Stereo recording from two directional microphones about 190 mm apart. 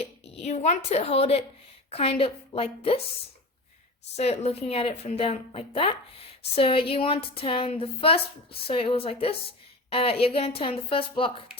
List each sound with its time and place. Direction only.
0.0 s a sound: 35° left (ahead or behind)
0.9 s a woman's voice: 35° left (ahead or behind)
4.2 s a woman's voice: 35° left (ahead or behind)